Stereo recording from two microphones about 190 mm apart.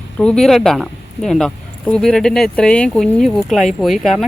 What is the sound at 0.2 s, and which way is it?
Speech, 5° left (ahead or behind).